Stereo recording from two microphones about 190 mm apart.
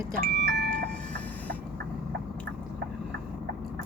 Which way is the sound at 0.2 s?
60° right (ahead or behind).